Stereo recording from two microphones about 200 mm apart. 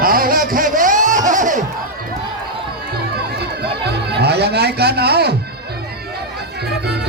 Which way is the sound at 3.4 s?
55° right (ahead or behind).